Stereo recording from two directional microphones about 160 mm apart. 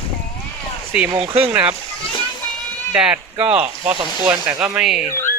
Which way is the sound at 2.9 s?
10° right (ahead or behind).